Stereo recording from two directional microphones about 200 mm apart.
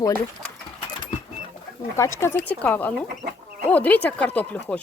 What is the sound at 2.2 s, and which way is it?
Speech, 10° left (ahead or behind).